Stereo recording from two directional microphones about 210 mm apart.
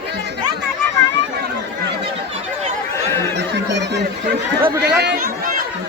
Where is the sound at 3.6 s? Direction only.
55° right (ahead or behind).